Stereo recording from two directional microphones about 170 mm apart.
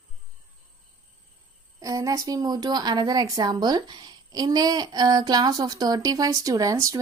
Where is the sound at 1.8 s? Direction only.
20° right (ahead or behind).